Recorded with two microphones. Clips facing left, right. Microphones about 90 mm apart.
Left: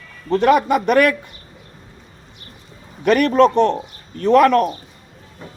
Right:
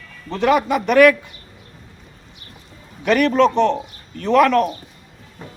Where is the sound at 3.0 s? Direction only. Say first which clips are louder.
Left 2 dB; 45° left (ahead or behind).